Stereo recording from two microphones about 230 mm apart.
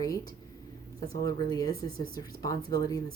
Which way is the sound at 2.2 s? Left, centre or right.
Centre.